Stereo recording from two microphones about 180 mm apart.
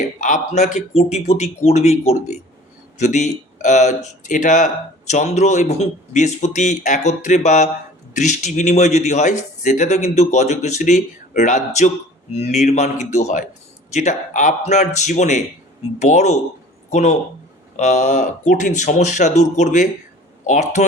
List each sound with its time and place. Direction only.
0.2 s speech: 40° left (ahead or behind)